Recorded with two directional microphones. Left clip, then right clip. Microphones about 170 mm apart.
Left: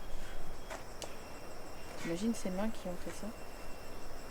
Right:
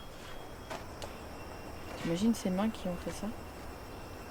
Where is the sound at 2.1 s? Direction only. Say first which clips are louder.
Right 5 dB; 15° right (ahead or behind).